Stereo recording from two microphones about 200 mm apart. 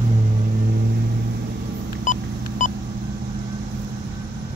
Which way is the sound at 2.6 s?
40° left (ahead or behind).